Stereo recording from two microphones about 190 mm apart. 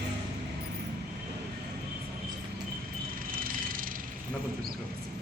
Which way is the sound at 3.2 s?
50° right (ahead or behind).